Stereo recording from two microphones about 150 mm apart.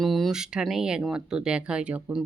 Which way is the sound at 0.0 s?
Centre (ahead or behind).